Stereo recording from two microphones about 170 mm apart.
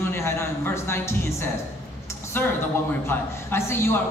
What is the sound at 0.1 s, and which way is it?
A man's voice, 15° left (ahead or behind).